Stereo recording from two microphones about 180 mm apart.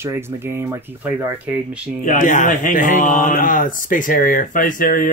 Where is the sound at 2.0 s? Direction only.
45° left (ahead or behind).